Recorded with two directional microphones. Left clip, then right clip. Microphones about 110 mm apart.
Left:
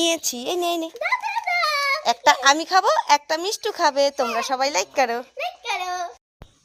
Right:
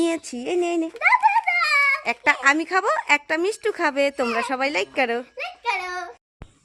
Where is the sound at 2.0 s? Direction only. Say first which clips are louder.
Left 2 dB; 5° right (ahead or behind).